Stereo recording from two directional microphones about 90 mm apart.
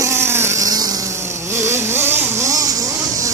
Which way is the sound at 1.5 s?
30° right (ahead or behind).